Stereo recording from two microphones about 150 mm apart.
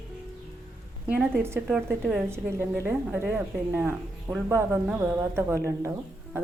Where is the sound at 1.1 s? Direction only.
15° right (ahead or behind).